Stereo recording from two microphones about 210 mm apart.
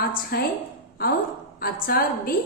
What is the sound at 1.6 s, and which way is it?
Speech, 45° left (ahead or behind).